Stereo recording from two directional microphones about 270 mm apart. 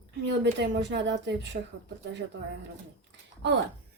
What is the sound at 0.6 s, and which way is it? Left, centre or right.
Speech, right.